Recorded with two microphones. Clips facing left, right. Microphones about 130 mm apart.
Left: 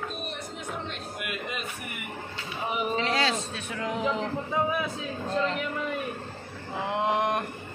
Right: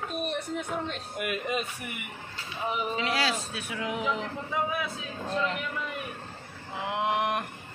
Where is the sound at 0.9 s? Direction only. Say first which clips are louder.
Right 3 dB; 40° right (ahead or behind).